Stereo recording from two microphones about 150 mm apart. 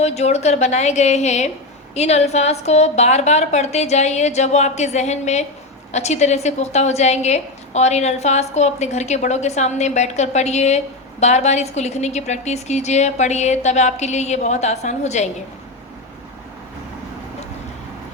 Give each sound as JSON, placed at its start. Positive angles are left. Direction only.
{"t": 0.0, "sound": "a woman's voice", "side_deg": 45}